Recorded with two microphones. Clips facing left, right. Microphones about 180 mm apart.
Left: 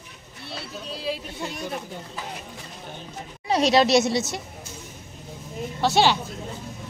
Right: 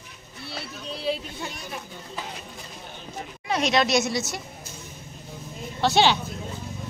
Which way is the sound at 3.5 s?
35° left (ahead or behind).